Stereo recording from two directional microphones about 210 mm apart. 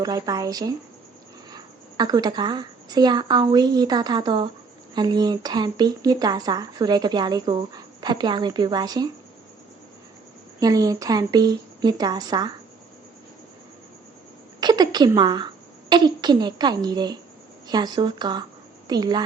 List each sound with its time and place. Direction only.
0.0 s a woman's voice: 15° right (ahead or behind)
10.6 s speech: 15° right (ahead or behind)
14.6 s a woman's voice: 20° right (ahead or behind)